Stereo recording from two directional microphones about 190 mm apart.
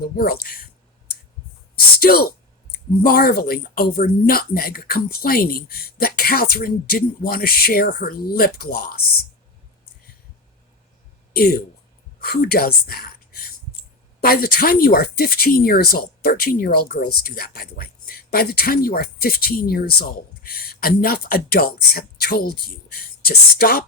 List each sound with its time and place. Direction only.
0.2 s speech: 50° left (ahead or behind)
1.7 s speech: 55° left (ahead or behind)
11.3 s speech: 50° left (ahead or behind)
14.2 s speech: 50° left (ahead or behind)